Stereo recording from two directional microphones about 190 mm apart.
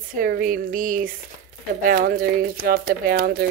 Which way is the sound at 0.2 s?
45° right (ahead or behind).